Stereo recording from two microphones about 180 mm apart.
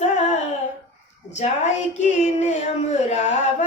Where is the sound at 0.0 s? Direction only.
40° left (ahead or behind).